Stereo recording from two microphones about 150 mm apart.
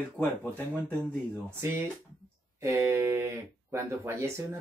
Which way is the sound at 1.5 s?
15° right (ahead or behind).